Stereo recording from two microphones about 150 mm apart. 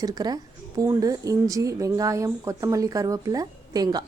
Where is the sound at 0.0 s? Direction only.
25° right (ahead or behind).